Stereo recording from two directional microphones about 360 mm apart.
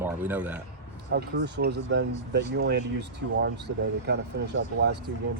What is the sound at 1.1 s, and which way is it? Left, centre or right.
Speech, right.